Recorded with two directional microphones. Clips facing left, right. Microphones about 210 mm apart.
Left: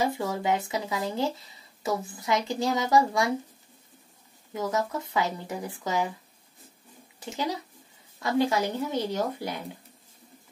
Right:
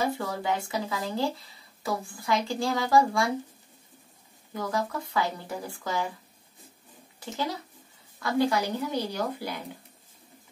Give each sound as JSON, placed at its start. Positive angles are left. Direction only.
{"t": 0.0, "sound": "speech", "side_deg": 20}
{"t": 4.6, "sound": "speech", "side_deg": 20}
{"t": 7.2, "sound": "speech", "side_deg": 20}